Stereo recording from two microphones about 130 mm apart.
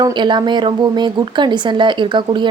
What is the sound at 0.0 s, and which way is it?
A woman's voice, 35° right (ahead or behind).